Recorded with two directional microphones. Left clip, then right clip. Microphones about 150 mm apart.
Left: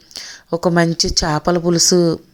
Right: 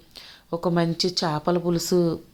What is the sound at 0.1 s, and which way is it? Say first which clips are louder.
A woman's voice: left 9 dB; 45° left (ahead or behind).